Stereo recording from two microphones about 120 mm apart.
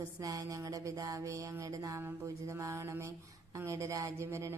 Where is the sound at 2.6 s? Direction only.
25° right (ahead or behind).